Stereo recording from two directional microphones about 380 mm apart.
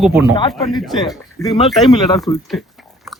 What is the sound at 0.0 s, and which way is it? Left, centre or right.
Speech, centre.